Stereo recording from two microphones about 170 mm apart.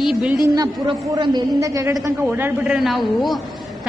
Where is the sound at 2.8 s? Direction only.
Centre (ahead or behind).